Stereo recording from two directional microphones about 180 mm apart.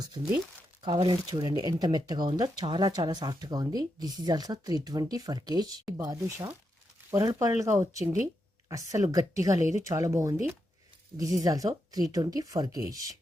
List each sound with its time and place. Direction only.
0.0 s speech: 25° right (ahead or behind)